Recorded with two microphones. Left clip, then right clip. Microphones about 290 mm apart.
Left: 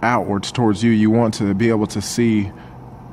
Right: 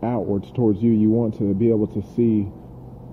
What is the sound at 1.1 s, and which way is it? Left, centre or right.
Speech, left.